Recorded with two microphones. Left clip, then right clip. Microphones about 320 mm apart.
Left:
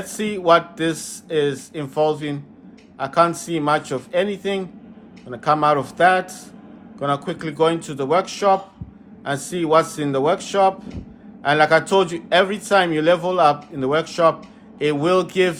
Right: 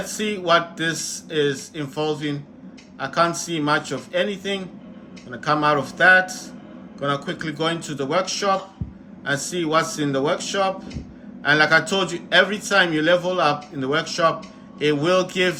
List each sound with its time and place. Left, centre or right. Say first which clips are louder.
0.0 s a man's voice: left 3 dB; centre